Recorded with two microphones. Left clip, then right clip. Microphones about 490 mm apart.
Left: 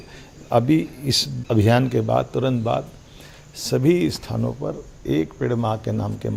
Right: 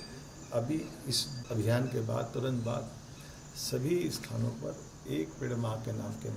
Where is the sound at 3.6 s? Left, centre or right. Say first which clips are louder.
Left 13 dB; left.